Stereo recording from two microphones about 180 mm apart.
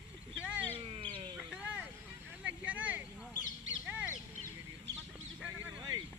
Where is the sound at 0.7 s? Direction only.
30° right (ahead or behind).